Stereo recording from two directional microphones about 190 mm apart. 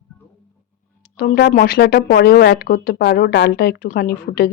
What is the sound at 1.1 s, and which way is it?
Speech, 55° left (ahead or behind).